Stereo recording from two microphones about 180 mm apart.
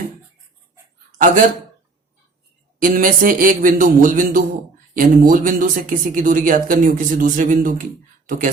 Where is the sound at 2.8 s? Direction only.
50° right (ahead or behind).